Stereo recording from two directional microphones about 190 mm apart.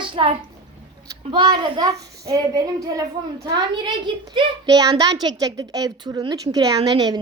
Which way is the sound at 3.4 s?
20° right (ahead or behind).